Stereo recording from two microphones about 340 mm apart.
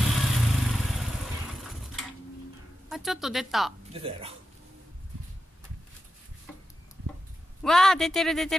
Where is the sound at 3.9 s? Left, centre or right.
Centre.